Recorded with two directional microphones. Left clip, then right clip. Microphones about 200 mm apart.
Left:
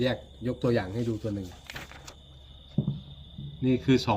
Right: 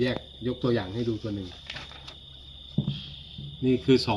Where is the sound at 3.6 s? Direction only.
10° left (ahead or behind).